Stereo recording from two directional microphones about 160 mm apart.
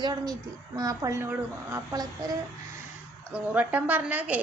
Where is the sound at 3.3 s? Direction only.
10° right (ahead or behind).